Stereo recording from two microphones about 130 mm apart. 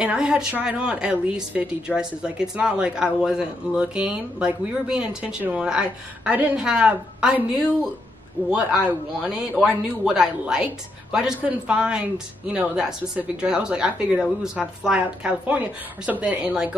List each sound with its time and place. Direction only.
0.0 s speech: 10° right (ahead or behind)